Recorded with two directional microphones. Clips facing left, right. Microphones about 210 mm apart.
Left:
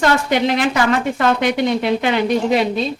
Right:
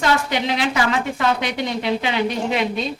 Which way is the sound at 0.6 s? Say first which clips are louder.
Left 4 dB; 50° left (ahead or behind).